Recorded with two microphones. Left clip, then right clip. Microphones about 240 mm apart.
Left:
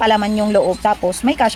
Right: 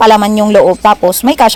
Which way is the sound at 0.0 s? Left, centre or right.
Right.